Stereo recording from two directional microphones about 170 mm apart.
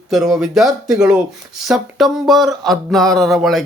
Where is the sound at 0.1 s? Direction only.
Centre (ahead or behind).